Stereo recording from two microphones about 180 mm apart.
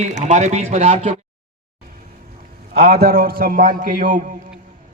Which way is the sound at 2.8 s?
60° right (ahead or behind).